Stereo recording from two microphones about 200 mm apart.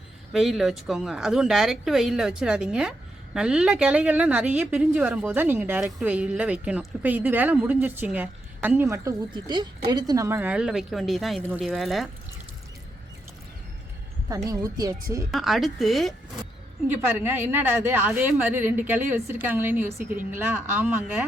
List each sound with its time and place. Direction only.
0.3 s a woman's voice: centre (ahead or behind)
14.3 s a woman's voice: 15° right (ahead or behind)
15.3 s a woman's voice: centre (ahead or behind)
16.9 s a woman's voice: 10° right (ahead or behind)